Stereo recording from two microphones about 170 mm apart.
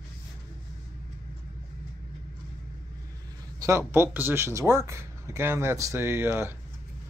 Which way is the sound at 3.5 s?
15° right (ahead or behind).